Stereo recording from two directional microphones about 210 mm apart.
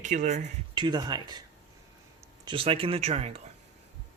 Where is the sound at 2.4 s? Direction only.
25° right (ahead or behind).